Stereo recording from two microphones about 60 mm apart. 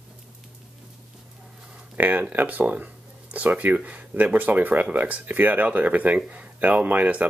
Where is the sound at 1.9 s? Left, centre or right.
Right.